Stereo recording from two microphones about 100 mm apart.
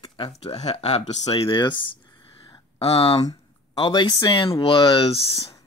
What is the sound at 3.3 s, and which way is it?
Speech, 50° left (ahead or behind).